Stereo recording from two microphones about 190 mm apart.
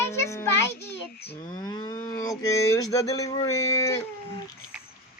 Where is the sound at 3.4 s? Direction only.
15° left (ahead or behind).